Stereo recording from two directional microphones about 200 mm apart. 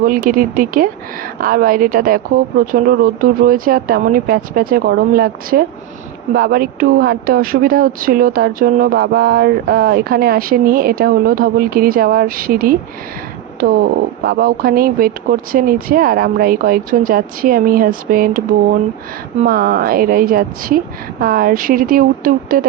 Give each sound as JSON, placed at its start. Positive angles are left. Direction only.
{"t": 0.0, "sound": "speech", "side_deg": -45}
{"t": 14.2, "sound": "speech", "side_deg": -50}